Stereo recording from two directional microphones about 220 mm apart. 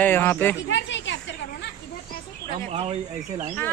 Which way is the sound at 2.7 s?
30° right (ahead or behind).